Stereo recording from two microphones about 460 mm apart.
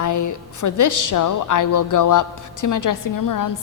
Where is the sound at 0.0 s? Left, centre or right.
Left.